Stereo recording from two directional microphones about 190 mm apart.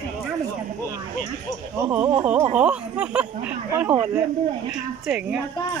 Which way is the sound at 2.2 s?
10° right (ahead or behind).